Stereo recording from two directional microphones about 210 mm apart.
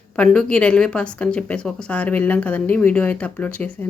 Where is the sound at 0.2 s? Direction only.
5° left (ahead or behind).